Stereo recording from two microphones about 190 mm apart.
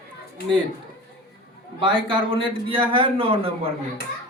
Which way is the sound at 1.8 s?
25° right (ahead or behind).